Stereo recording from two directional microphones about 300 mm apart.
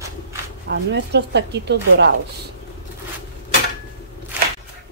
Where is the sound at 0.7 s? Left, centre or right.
Right.